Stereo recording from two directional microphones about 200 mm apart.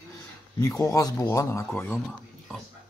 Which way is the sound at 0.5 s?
20° left (ahead or behind).